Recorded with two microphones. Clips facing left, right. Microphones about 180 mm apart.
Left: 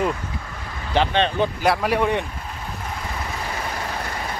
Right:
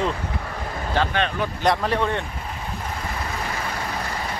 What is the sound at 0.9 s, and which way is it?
Speech, 20° left (ahead or behind).